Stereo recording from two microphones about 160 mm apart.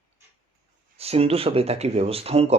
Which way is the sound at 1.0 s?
40° right (ahead or behind).